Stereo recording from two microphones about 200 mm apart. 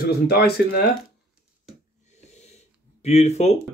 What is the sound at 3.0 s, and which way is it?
Speech, 35° left (ahead or behind).